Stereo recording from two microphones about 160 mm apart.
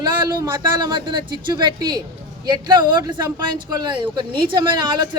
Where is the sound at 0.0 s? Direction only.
25° right (ahead or behind).